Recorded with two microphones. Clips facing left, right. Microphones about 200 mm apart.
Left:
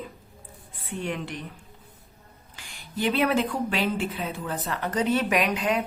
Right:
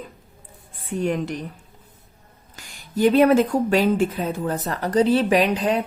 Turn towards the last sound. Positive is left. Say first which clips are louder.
# right 5 dB
turn(degrees=-35)  # may be behind; listen again after turning